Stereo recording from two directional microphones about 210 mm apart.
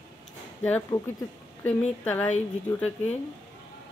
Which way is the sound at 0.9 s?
20° left (ahead or behind).